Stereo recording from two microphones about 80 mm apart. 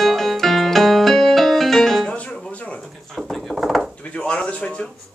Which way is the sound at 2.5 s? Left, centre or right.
Centre.